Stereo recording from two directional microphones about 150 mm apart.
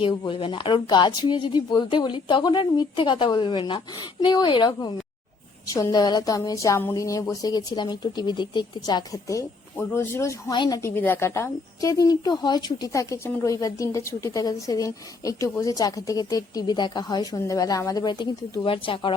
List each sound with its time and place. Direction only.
0.0 s a woman's voice: 35° left (ahead or behind); by 10.3 s 20° left (ahead or behind)
10.5 s speech: 30° left (ahead or behind)
10.8 s a woman's voice: 10° left (ahead or behind); by 19.1 s 35° left (ahead or behind)